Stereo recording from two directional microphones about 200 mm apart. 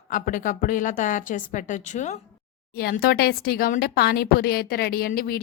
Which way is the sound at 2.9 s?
50° left (ahead or behind).